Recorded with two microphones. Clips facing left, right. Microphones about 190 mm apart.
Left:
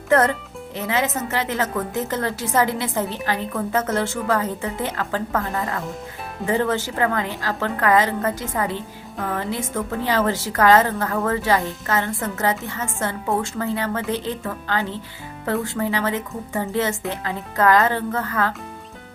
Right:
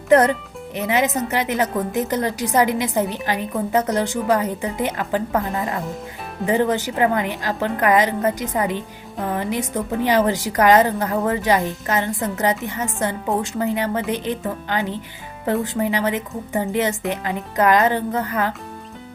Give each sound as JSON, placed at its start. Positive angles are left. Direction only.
{"t": 0.1, "sound": "a woman's voice", "side_deg": -15}